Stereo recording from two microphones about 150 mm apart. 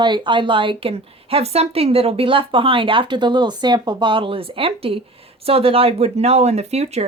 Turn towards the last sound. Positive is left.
turn(degrees=-45)  # may be behind; listen again after turning